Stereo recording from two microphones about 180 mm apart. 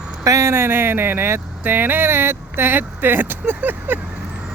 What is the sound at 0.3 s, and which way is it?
Speech, 15° right (ahead or behind).